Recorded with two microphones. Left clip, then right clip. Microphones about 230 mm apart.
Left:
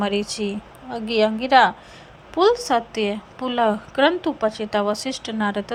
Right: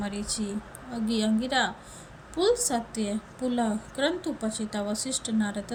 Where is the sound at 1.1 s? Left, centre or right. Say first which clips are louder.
Left 12 dB; left.